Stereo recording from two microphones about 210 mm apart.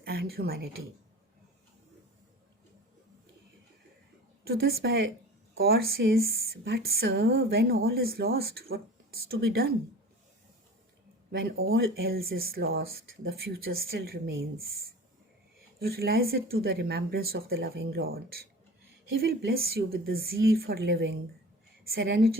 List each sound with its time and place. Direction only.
0.0 s speech: 50° right (ahead or behind)
4.6 s a woman's voice: 65° right (ahead or behind)
5.6 s speech: 45° right (ahead or behind)
11.3 s speech: 45° right (ahead or behind)
19.2 s speech: 45° right (ahead or behind)